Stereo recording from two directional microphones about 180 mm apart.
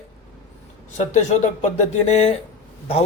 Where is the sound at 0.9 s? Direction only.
40° left (ahead or behind).